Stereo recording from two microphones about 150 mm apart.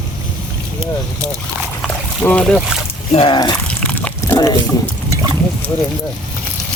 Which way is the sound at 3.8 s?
10° left (ahead or behind).